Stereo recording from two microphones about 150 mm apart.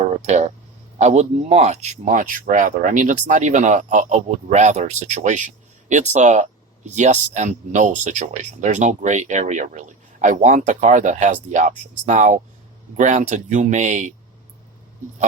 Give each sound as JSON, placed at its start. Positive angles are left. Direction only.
{"t": 0.2, "sound": "speech", "side_deg": -50}